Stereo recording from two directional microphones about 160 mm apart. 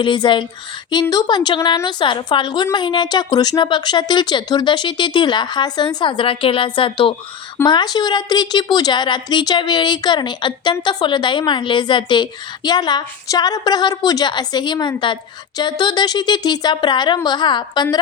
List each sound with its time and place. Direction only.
0.0 s a woman's voice: 30° left (ahead or behind)